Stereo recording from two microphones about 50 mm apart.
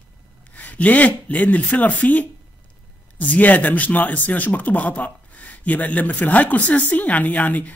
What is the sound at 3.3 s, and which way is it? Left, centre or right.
Speech, left.